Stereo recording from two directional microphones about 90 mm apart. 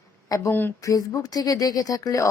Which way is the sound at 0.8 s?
40° left (ahead or behind).